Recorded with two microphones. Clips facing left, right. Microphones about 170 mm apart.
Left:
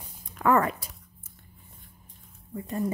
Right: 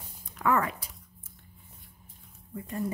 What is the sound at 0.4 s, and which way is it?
Speech, 45° left (ahead or behind).